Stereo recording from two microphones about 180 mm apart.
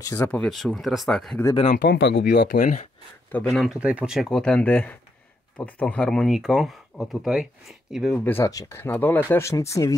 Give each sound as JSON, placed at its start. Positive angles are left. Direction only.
{"t": 0.0, "sound": "speech", "side_deg": 20}
{"t": 0.3, "sound": "speech", "side_deg": 5}
{"t": 1.4, "sound": "speech", "side_deg": 25}
{"t": 1.7, "sound": "speech", "side_deg": 50}
{"t": 2.0, "sound": "speech", "side_deg": 90}
{"t": 2.3, "sound": "speech", "side_deg": 50}
{"t": 3.4, "sound": "speech", "side_deg": 0}
{"t": 8.2, "sound": "speech", "side_deg": 10}